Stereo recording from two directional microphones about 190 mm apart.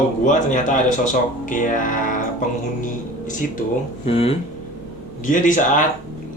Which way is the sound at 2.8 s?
45° left (ahead or behind).